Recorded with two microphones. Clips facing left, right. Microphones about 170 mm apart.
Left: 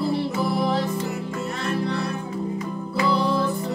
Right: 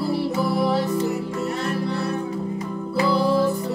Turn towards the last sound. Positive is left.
turn(degrees=-5)  # may be behind; listen again after turning